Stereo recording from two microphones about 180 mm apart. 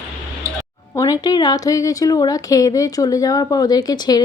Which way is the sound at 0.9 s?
20° left (ahead or behind).